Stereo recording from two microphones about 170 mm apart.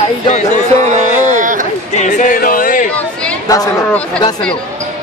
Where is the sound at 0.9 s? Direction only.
50° right (ahead or behind).